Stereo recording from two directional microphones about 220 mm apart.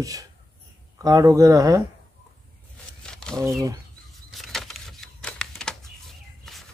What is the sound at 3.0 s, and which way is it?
Wild animals, 5° left (ahead or behind).